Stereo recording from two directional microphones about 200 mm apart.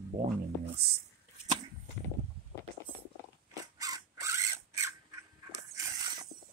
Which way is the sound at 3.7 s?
15° right (ahead or behind).